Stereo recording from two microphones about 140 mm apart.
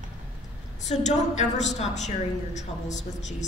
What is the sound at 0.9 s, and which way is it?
A woman's voice, 55° left (ahead or behind).